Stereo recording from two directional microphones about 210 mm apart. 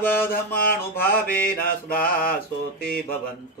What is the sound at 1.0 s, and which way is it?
Mantra, 45° left (ahead or behind).